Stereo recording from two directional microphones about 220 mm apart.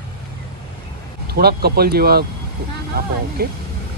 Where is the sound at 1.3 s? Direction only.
45° right (ahead or behind).